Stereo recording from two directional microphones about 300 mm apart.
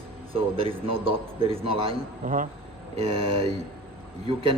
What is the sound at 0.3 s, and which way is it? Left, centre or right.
A man's voice, centre.